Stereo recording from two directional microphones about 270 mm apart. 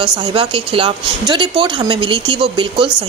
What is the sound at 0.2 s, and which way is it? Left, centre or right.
Speech, centre.